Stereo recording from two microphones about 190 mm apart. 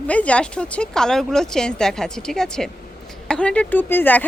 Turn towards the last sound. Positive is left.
turn(degrees=10)  # may be behind; listen again after turning